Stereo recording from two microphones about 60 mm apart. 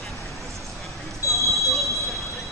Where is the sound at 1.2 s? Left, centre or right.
Left.